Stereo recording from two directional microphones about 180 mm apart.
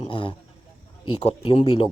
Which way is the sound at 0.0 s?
30° left (ahead or behind).